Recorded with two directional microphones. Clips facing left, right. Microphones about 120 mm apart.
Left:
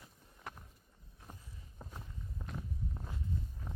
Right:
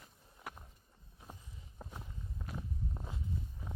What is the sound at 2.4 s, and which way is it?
Walk, 5° left (ahead or behind).